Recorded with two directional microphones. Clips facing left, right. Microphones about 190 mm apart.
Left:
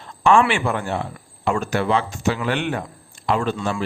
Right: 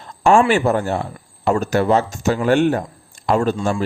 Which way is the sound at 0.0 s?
45° right (ahead or behind).